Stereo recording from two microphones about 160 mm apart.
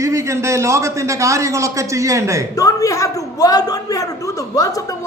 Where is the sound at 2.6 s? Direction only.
20° left (ahead or behind).